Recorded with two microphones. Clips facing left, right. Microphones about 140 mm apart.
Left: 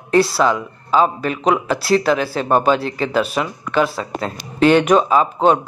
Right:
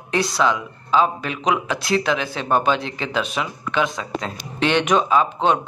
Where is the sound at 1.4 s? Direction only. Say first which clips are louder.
Left 3 dB; centre (ahead or behind).